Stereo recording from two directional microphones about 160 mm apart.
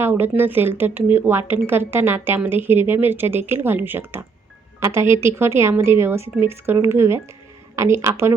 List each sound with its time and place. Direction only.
0.0 s speech: 15° right (ahead or behind)